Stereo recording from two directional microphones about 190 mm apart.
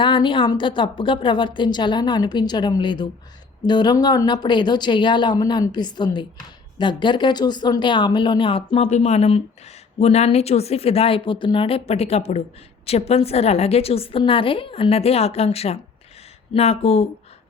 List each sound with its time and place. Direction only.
0.0 s a woman's voice: 25° left (ahead or behind)